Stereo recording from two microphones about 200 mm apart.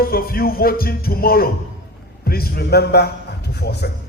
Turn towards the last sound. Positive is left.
turn(degrees=55)  # may be behind; listen again after turning